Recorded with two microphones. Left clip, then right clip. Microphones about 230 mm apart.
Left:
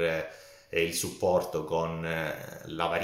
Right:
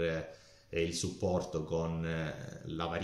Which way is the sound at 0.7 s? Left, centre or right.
Centre.